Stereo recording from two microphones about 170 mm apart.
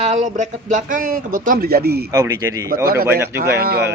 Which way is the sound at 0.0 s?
45° right (ahead or behind).